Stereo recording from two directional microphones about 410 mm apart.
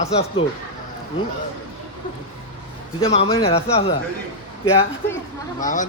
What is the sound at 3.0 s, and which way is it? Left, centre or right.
Speech, centre.